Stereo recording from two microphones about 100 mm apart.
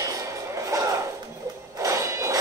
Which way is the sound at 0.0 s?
30° right (ahead or behind).